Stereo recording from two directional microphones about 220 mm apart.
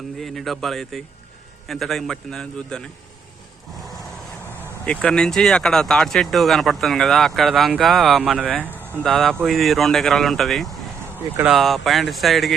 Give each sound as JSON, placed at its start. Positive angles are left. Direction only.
{"t": 0.2, "sound": "speech", "side_deg": 0}
{"t": 4.9, "sound": "speech", "side_deg": 5}